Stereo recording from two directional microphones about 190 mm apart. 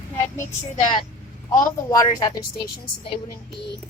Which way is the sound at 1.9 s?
20° left (ahead or behind).